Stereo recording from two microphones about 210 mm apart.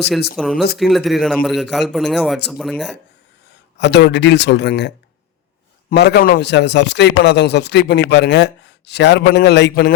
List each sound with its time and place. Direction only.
0.3 s a man's voice: centre (ahead or behind)
3.8 s a man's voice: 55° left (ahead or behind)
5.9 s a man's voice: 50° left (ahead or behind)